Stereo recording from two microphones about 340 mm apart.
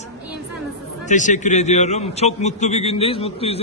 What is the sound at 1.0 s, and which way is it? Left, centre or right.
A man's voice, left.